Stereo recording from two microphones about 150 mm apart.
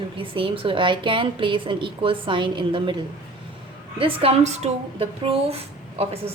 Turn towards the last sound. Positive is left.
turn(degrees=-40)  # may be behind; listen again after turning